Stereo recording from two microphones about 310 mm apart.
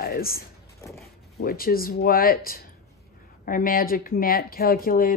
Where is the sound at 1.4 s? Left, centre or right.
Left.